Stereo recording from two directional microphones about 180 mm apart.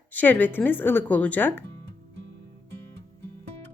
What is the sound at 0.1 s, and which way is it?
Speech, 10° left (ahead or behind).